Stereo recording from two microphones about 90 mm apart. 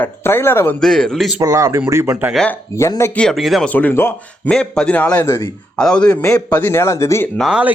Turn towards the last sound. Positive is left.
turn(degrees=-5)  # may be behind; listen again after turning